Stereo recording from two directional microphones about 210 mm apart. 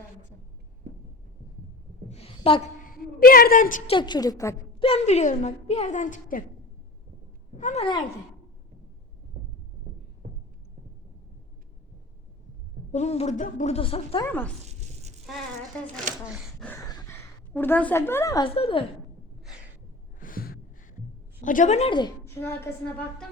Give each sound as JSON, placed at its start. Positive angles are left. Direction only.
{"t": 2.0, "sound": "a sound", "side_deg": 30}
{"t": 2.8, "sound": "a woman's voice", "side_deg": 45}
{"t": 3.9, "sound": "a woman's voice", "side_deg": 20}
{"t": 4.8, "sound": "a woman's voice", "side_deg": 30}
{"t": 7.6, "sound": "a woman's voice", "side_deg": 30}
{"t": 12.9, "sound": "a woman's voice", "side_deg": 30}
{"t": 14.3, "sound": "a woman's voice", "side_deg": 5}
{"t": 14.6, "sound": "a sound", "side_deg": -30}
{"t": 16.3, "sound": "speech", "side_deg": 0}
{"t": 16.6, "sound": "speech", "side_deg": 15}
{"t": 20.1, "sound": "gasp", "side_deg": 40}
{"t": 21.4, "sound": "a woman's voice", "side_deg": 35}
{"t": 22.4, "sound": "a woman's voice", "side_deg": 10}